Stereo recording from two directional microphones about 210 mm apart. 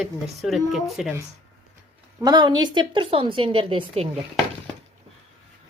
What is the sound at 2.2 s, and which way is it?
Speech, 20° right (ahead or behind).